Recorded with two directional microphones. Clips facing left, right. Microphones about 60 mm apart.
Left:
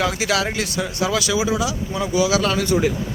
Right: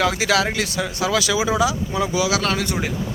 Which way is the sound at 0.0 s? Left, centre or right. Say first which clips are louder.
Right 2 dB; right.